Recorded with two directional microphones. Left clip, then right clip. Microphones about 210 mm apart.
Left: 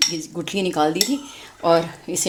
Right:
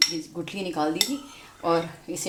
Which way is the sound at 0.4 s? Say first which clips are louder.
Left 8 dB; 50° left (ahead or behind).